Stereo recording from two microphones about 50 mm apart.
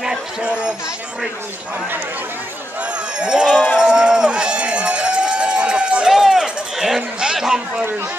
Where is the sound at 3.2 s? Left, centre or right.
Centre.